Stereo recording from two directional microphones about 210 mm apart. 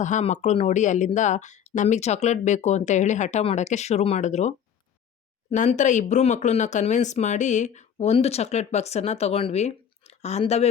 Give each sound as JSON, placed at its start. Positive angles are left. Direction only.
{"t": 0.0, "sound": "speech", "side_deg": 35}